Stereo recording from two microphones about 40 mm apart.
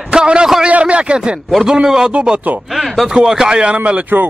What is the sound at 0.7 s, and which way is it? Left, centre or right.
Speech, right.